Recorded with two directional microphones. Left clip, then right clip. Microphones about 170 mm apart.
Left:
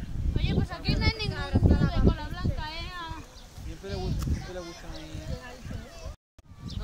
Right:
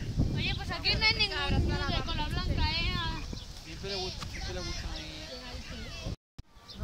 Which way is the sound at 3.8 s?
60° left (ahead or behind).